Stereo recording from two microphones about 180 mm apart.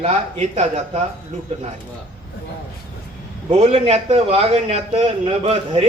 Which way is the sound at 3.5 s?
35° right (ahead or behind).